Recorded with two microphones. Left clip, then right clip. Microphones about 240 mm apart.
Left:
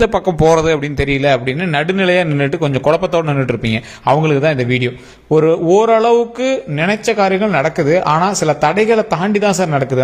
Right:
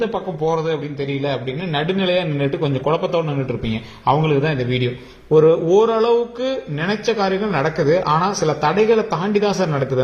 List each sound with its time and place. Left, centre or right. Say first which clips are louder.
0.0 s a man's voice: left 9 dB; left